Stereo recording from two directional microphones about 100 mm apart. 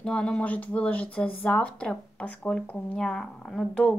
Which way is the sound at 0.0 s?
10° left (ahead or behind).